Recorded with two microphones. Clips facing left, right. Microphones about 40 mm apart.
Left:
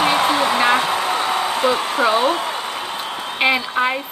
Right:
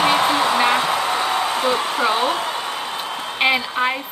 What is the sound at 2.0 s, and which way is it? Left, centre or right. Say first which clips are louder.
Speech: left 3 dB; left.